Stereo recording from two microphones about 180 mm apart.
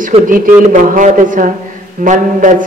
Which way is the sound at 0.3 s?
45° right (ahead or behind).